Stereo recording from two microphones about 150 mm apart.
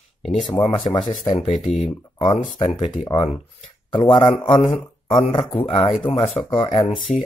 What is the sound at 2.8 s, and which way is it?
Speech, 30° left (ahead or behind).